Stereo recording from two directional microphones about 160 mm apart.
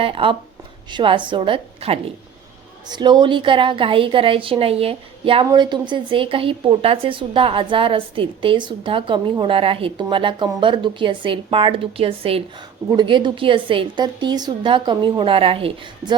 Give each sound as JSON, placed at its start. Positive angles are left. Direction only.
{"t": 0.0, "sound": "a woman's voice", "side_deg": -35}